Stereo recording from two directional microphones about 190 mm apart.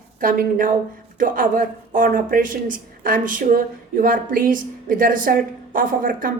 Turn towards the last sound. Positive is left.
turn(degrees=-45)  # may be behind; listen again after turning